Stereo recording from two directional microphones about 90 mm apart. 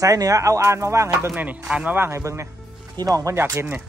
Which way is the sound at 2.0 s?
30° right (ahead or behind).